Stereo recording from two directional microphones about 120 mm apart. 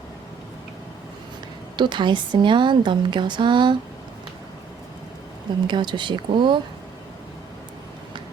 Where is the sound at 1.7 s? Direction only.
40° right (ahead or behind).